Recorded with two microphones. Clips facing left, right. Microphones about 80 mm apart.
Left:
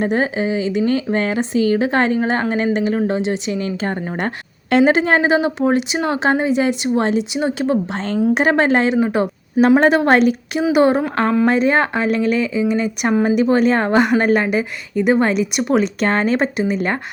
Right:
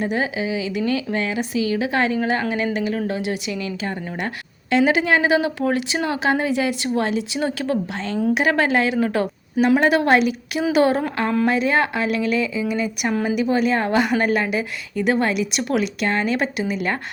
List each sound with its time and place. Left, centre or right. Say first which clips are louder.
0.0 s a woman's voice: left 5 dB; left
5.3 s speech: left 4 dB; left
7.9 s a woman's voice: left 4 dB; left
9.0 s speech: left 3 dB; centre
9.6 s a woman's voice: left 4 dB; left
10.1 s a woman's voice: left 3 dB; left
10.5 s speech: left 2 dB; centre
13.2 s a woman's voice: left 5 dB; left
14.9 s speech: left 4 dB; left